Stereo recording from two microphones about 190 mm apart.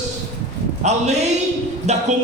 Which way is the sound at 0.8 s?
35° right (ahead or behind).